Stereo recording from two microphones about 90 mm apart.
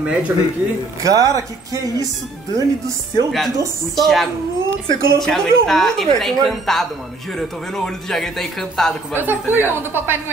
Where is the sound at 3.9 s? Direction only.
Centre (ahead or behind).